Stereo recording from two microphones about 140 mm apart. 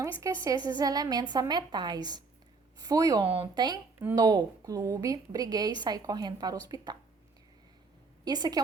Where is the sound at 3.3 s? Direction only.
35° right (ahead or behind).